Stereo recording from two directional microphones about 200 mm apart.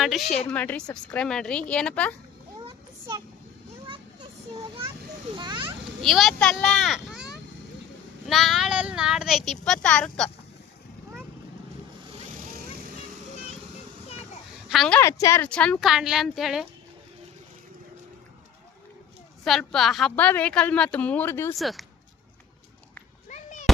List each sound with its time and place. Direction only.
0.0 s a woman's voice: centre (ahead or behind)
3.8 s a sound: 25° right (ahead or behind)
5.4 s children playing: 25° right (ahead or behind)
6.0 s a child's voice: centre (ahead or behind)
12.3 s vehicle: 45° right (ahead or behind)
14.7 s a woman's voice: centre (ahead or behind)
19.5 s a woman's voice: centre (ahead or behind)
21.5 s a woman's voice: centre (ahead or behind)
23.3 s a sound: 35° left (ahead or behind)